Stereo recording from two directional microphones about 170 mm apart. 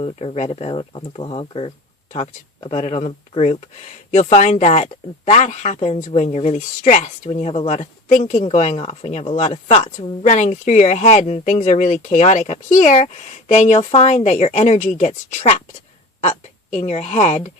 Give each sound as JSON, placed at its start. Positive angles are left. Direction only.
{"t": 0.0, "sound": "speech", "side_deg": 35}
{"t": 16.6, "sound": "speech", "side_deg": 45}